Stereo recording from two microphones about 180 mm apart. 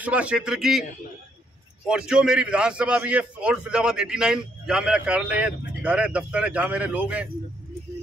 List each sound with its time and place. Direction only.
0.0 s a man's voice: 5° right (ahead or behind)
1.9 s a man's voice: 5° right (ahead or behind)